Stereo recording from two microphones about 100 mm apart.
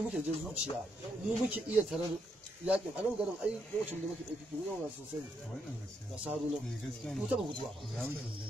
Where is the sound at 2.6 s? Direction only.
15° right (ahead or behind).